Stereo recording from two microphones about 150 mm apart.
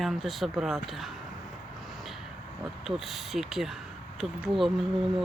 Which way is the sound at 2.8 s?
Centre (ahead or behind).